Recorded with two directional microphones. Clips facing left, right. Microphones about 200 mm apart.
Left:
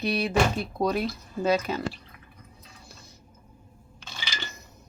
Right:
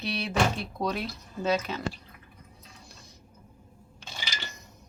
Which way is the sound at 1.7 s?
45° left (ahead or behind).